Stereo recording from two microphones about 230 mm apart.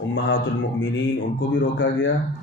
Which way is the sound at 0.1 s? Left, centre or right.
Left.